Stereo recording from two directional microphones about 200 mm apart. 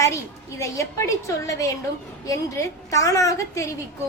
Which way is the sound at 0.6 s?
15° left (ahead or behind).